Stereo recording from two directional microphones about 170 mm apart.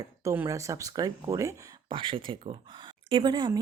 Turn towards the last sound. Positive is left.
turn(degrees=-25)  # may be behind; listen again after turning